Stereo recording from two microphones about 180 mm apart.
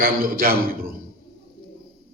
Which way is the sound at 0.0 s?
55° right (ahead or behind).